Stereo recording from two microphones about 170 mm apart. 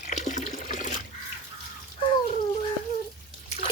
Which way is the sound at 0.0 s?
45° left (ahead or behind).